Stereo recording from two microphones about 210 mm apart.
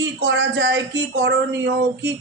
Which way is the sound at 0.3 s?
60° right (ahead or behind).